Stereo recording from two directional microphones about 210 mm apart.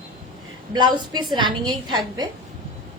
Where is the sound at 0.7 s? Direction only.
20° right (ahead or behind).